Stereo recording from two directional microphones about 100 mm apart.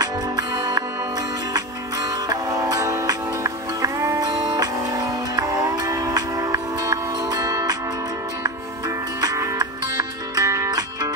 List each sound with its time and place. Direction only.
0.0 s music: 35° right (ahead or behind)
2.2 s music: 35° right (ahead or behind)
9.2 s music: 35° right (ahead or behind)